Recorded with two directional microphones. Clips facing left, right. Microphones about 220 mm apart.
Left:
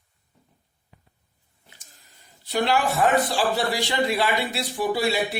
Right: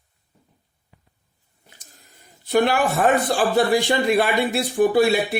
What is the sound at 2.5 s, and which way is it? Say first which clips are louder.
A man's voice: right 4 dB; 50° right (ahead or behind).